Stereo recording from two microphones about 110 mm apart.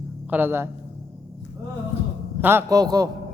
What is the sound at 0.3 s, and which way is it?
Speech, 20° right (ahead or behind).